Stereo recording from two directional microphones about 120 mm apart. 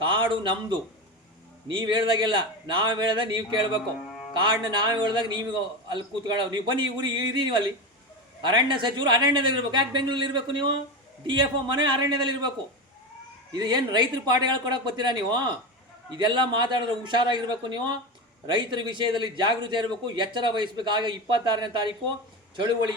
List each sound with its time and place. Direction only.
0.0 s a man's voice: 40° right (ahead or behind)
13.6 s a man's voice: 35° right (ahead or behind)